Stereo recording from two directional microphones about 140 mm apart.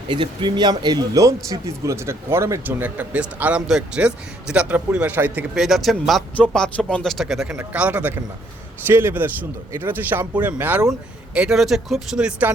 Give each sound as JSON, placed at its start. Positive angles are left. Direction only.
{"t": 0.1, "sound": "speech", "side_deg": -35}